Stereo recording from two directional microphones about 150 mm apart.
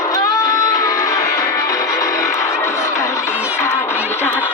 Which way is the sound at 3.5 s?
15° left (ahead or behind).